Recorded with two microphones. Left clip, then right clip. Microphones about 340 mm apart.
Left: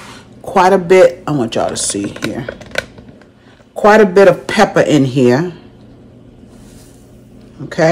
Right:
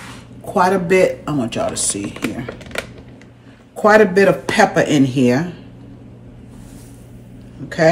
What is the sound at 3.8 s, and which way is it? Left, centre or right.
Speech, left.